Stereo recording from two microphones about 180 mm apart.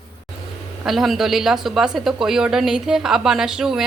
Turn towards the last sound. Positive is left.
turn(degrees=-5)  # may be behind; listen again after turning